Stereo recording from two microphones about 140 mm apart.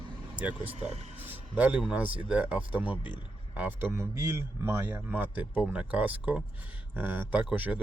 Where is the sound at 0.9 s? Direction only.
50° right (ahead or behind).